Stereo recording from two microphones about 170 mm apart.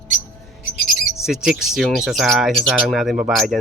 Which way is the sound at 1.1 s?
5° right (ahead or behind).